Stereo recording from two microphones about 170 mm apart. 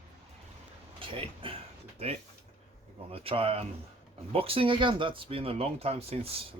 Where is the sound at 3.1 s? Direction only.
35° right (ahead or behind).